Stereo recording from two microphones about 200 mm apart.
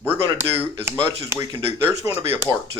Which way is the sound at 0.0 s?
10° right (ahead or behind).